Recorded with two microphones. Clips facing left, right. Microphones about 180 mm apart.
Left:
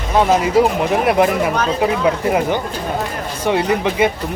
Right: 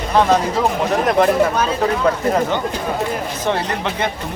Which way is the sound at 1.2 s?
10° left (ahead or behind).